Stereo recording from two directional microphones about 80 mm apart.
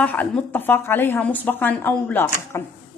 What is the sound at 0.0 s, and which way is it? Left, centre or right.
A woman's voice, left.